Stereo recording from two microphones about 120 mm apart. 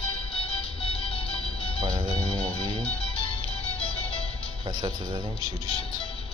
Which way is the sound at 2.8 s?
10° left (ahead or behind).